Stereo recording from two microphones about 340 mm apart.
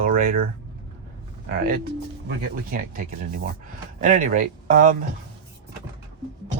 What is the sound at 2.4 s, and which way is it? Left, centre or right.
Speech, right.